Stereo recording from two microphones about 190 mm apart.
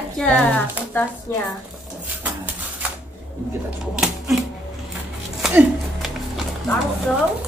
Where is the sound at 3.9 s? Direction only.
5° right (ahead or behind).